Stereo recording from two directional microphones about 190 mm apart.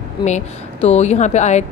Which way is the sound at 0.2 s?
35° left (ahead or behind).